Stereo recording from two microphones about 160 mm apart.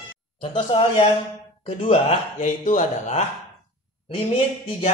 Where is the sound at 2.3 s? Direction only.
55° left (ahead or behind).